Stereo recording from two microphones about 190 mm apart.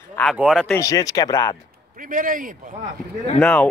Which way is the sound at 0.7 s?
15° left (ahead or behind).